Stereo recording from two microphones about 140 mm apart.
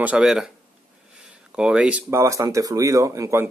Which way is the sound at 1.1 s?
5° right (ahead or behind).